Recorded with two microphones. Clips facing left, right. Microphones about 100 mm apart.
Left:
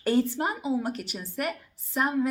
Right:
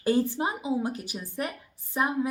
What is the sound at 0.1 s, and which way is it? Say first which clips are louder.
A woman's voice: even; 15° right (ahead or behind).